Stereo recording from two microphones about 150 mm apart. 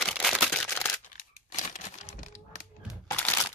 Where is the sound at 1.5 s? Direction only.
55° left (ahead or behind).